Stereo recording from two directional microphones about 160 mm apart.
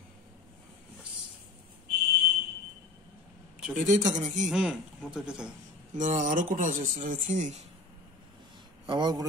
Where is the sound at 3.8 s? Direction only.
50° right (ahead or behind).